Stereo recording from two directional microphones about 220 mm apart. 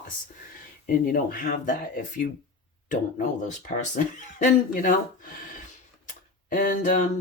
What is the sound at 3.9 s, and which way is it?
Speech, 35° left (ahead or behind).